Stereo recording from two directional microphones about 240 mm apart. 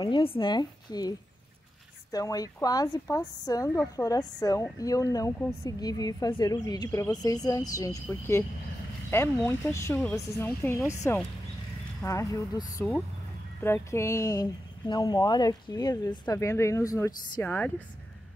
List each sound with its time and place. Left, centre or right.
0.0 s a woman's voice: left
2.1 s speech: centre
12.0 s speech: centre